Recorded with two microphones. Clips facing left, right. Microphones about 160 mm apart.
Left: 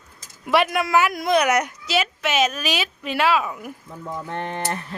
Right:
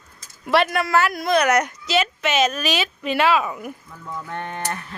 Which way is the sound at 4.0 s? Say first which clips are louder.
Left 2 dB; 30° left (ahead or behind).